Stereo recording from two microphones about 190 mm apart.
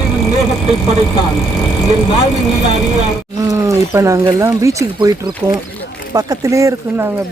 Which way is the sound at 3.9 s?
15° right (ahead or behind).